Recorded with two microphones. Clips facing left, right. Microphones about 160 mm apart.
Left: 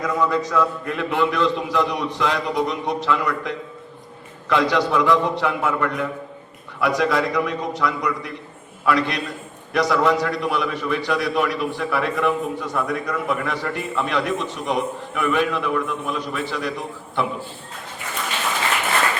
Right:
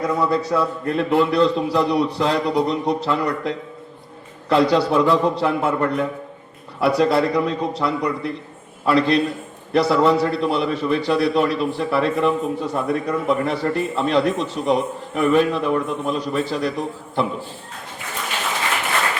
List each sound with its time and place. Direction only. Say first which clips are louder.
0.0 s a man's voice: right 1 dB; 35° right (ahead or behind)